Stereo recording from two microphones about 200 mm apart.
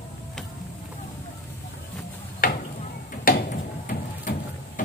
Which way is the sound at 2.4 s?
45° left (ahead or behind).